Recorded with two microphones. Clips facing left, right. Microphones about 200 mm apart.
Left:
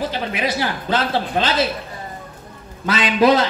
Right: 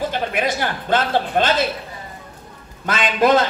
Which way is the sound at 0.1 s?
50° right (ahead or behind).